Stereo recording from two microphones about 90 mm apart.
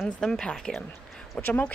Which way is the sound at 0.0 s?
5° left (ahead or behind).